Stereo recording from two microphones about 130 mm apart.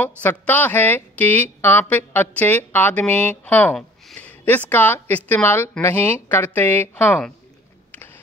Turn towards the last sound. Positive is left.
turn(degrees=15)  # may be behind; listen again after turning